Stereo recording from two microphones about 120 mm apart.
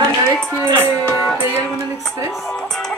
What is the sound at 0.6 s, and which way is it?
Music, 20° right (ahead or behind).